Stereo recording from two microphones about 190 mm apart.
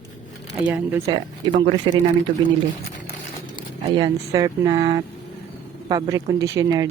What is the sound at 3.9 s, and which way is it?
Speech, 20° right (ahead or behind).